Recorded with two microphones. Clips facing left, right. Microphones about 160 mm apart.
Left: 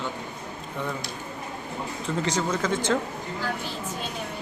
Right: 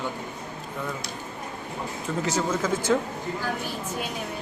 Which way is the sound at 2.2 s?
5° right (ahead or behind).